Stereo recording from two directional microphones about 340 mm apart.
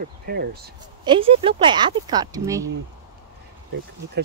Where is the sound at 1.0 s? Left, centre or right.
Centre.